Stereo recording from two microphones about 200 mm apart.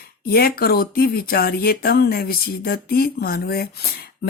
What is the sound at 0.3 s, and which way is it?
Speech, 50° left (ahead or behind).